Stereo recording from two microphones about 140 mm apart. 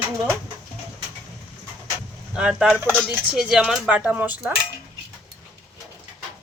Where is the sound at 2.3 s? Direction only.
5° right (ahead or behind).